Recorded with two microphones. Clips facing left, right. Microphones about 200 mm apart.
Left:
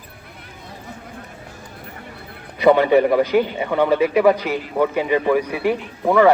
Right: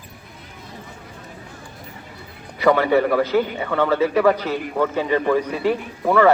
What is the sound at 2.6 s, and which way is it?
A man's voice, 20° left (ahead or behind).